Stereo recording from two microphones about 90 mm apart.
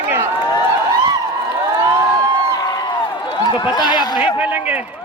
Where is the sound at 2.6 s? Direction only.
50° left (ahead or behind).